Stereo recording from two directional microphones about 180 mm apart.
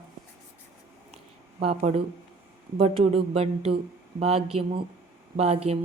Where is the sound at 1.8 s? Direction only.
35° right (ahead or behind).